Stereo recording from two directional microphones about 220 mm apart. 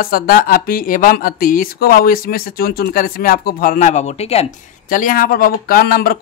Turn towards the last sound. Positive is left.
turn(degrees=45)  # may be behind; listen again after turning